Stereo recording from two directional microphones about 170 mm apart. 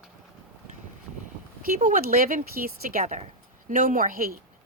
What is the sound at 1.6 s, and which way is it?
Speech, 55° right (ahead or behind).